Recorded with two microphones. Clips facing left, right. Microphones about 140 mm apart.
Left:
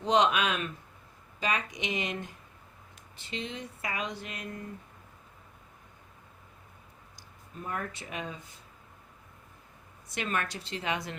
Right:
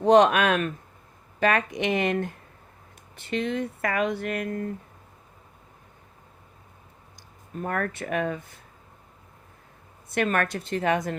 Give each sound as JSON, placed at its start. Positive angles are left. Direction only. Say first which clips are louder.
{"t": 0.0, "sound": "a woman's voice", "louder": "right 8 dB", "side_deg": -50}
{"t": 7.5, "sound": "speech", "louder": "right 8 dB", "side_deg": -60}
{"t": 10.1, "sound": "a woman's voice", "louder": "right 8 dB", "side_deg": -55}